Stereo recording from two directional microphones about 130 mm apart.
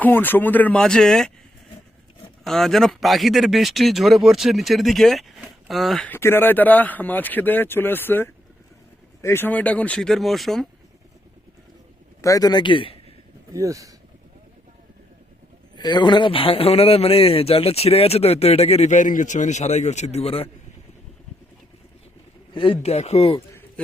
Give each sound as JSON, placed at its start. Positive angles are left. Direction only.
{"t": 0.0, "sound": "speech", "side_deg": 15}
{"t": 2.4, "sound": "speech", "side_deg": 0}
{"t": 6.1, "sound": "speech", "side_deg": 20}
{"t": 12.2, "sound": "speech", "side_deg": 25}
{"t": 13.5, "sound": "speech", "side_deg": -25}
{"t": 15.7, "sound": "a man's voice", "side_deg": 35}
{"t": 22.5, "sound": "a man's voice", "side_deg": 40}